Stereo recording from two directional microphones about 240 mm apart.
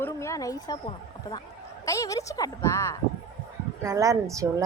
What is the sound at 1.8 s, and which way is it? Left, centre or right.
Speech, centre.